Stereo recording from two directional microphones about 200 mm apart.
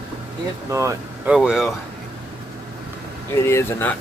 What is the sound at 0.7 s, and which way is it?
Speech, 15° right (ahead or behind).